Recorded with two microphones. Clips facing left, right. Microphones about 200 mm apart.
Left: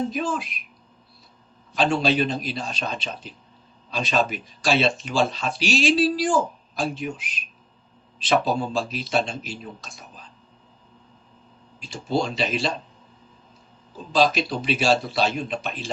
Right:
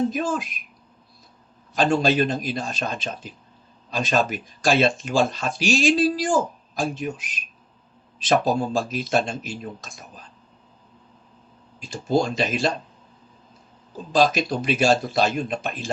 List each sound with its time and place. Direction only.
0.1 s speech: 45° right (ahead or behind)
1.7 s speech: 45° right (ahead or behind)
11.8 s speech: 45° right (ahead or behind)
14.1 s speech: 45° right (ahead or behind)